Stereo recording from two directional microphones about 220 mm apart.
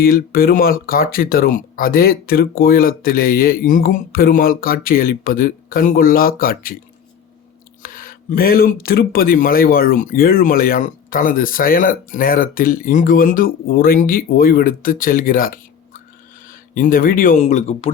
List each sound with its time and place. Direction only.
0.0 s speech: 40° left (ahead or behind)
7.8 s speech: 40° left (ahead or behind)